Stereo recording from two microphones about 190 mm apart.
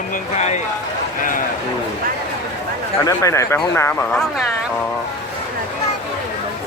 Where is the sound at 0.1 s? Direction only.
40° left (ahead or behind).